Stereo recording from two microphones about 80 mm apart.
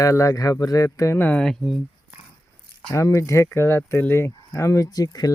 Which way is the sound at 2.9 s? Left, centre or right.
Left.